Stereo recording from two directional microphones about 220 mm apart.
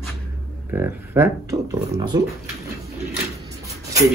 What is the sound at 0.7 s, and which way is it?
Speech, 10° right (ahead or behind).